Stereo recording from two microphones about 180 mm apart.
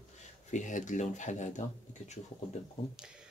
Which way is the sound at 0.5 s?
45° left (ahead or behind).